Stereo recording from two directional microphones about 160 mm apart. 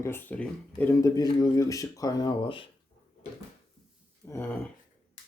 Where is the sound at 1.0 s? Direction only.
25° left (ahead or behind).